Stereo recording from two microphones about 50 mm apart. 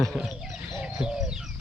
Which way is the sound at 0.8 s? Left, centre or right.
Centre.